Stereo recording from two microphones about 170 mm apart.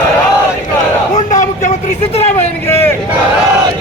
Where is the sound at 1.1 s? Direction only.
45° left (ahead or behind).